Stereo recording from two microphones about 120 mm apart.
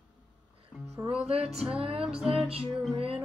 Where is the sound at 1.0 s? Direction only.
20° right (ahead or behind).